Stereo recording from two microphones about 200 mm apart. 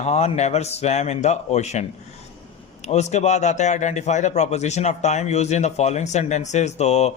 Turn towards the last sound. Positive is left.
turn(degrees=35)  # may be behind; listen again after turning